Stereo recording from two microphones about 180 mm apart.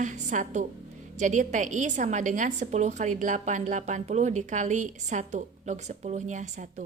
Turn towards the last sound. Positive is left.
turn(degrees=-45)  # may be behind; listen again after turning